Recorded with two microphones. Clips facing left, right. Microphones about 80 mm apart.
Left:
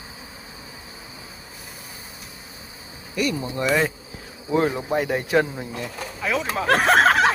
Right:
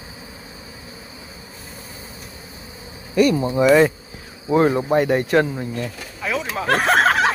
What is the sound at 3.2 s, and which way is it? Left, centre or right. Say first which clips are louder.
Speech: right 8 dB; right.